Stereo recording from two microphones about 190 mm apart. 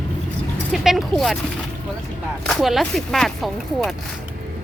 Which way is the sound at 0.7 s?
Centre (ahead or behind).